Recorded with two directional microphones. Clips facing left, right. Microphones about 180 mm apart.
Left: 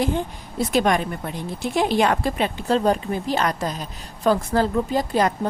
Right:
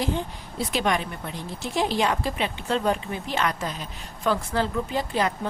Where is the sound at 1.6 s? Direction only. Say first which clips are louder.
Left 4 dB; 60° left (ahead or behind).